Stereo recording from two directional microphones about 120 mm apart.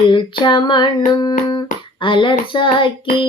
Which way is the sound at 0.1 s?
40° left (ahead or behind).